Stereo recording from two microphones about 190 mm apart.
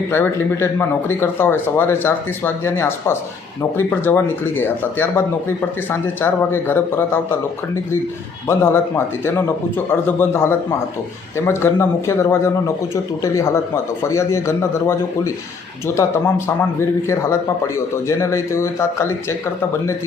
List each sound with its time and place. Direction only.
0.1 s speech: 10° left (ahead or behind)
8.4 s speech: 10° left (ahead or behind)